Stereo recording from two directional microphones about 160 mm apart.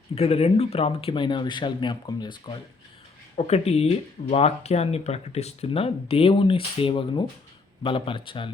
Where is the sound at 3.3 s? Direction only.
40° left (ahead or behind).